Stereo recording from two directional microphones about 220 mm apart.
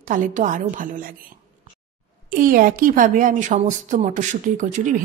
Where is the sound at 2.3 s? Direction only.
40° right (ahead or behind).